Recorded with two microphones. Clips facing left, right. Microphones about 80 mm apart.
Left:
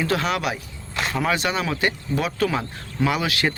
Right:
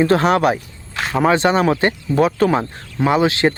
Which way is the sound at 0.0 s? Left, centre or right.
Right.